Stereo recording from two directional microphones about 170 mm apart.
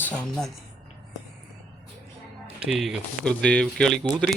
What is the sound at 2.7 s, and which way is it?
Speech, centre (ahead or behind).